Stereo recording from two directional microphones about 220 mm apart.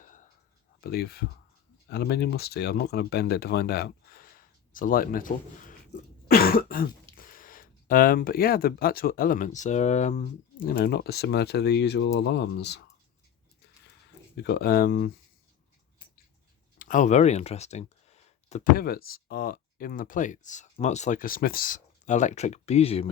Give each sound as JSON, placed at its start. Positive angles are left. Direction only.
{"t": 0.0, "sound": "a sound", "side_deg": 35}
{"t": 0.8, "sound": "speech", "side_deg": 45}
{"t": 6.2, "sound": "cough", "side_deg": 40}
{"t": 7.2, "sound": "speech", "side_deg": 40}
{"t": 10.7, "sound": "speech", "side_deg": 45}
{"t": 14.3, "sound": "speech", "side_deg": 45}
{"t": 16.7, "sound": "speech", "side_deg": 40}